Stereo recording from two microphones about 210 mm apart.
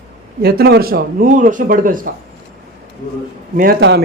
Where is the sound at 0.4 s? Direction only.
50° right (ahead or behind).